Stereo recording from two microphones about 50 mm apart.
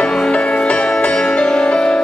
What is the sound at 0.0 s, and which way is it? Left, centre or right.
Music, centre.